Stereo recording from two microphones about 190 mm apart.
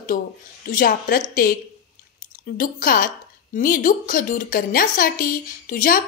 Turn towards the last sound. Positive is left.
turn(degrees=45)  # may be behind; listen again after turning